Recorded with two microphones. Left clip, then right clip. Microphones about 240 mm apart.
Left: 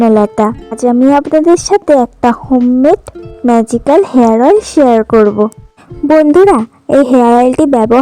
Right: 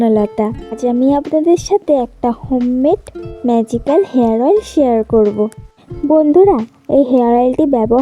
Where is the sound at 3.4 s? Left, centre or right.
Left.